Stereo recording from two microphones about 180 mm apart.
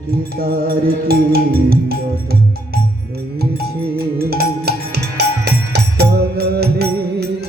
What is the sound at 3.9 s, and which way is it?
Music, 60° right (ahead or behind).